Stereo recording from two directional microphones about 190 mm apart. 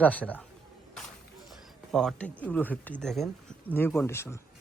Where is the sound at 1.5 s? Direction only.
Centre (ahead or behind).